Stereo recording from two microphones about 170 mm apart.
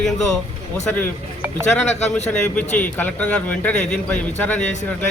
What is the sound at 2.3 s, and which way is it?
A man's voice, 5° left (ahead or behind).